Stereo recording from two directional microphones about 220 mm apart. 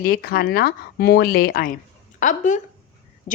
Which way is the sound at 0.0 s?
40° left (ahead or behind).